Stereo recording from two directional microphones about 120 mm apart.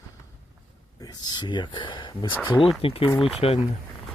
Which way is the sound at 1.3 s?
40° left (ahead or behind).